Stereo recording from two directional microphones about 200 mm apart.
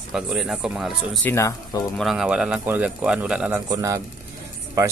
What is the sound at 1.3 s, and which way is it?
Speech, 15° left (ahead or behind).